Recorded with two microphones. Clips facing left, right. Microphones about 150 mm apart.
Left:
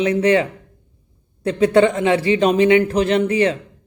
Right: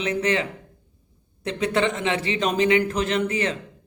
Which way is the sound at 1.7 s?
35° left (ahead or behind).